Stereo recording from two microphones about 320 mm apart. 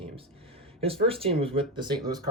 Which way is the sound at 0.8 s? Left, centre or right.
Centre.